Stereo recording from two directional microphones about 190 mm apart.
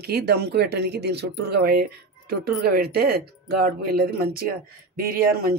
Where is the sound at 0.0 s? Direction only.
60° right (ahead or behind).